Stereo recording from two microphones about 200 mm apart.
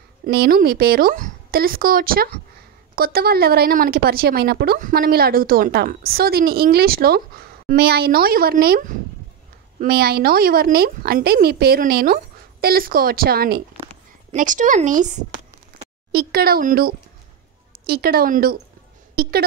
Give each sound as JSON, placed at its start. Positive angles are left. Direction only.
{"t": 0.3, "sound": "speech", "side_deg": -50}
{"t": 16.1, "sound": "speech", "side_deg": -50}